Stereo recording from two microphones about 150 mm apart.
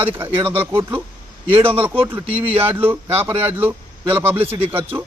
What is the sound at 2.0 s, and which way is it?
Speech, 15° right (ahead or behind).